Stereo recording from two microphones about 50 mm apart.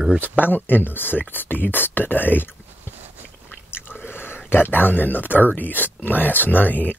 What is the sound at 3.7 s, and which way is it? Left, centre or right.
Speech, left.